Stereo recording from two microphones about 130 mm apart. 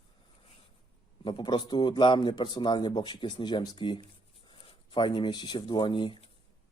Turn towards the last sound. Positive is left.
turn(degrees=40)  # may be behind; listen again after turning